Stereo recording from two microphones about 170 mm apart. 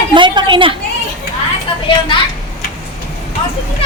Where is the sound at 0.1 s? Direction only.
25° right (ahead or behind).